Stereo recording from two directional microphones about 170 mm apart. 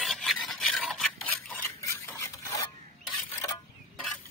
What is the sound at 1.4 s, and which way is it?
Stir, 10° left (ahead or behind).